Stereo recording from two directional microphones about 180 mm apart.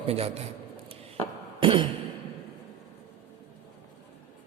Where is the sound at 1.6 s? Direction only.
30° right (ahead or behind).